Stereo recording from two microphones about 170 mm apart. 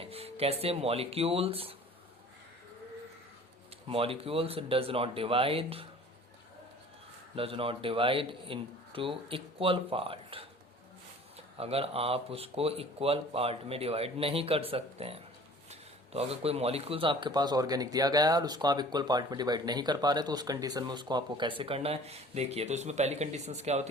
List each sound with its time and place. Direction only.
0.0 s speech: 35° right (ahead or behind)
3.8 s speech: 30° right (ahead or behind)
7.3 s speech: 35° right (ahead or behind)
11.5 s a man's voice: 35° right (ahead or behind)